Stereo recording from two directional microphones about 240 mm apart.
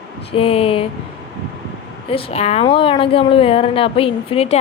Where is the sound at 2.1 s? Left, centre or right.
Left.